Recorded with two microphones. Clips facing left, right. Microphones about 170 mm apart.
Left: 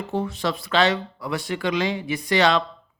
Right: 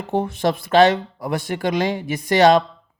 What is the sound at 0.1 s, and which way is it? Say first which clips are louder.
Speech: right 6 dB; 50° right (ahead or behind).